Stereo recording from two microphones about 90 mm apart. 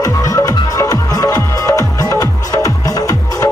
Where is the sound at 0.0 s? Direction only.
40° left (ahead or behind).